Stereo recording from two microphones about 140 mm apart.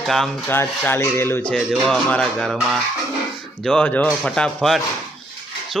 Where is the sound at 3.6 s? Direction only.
5° left (ahead or behind).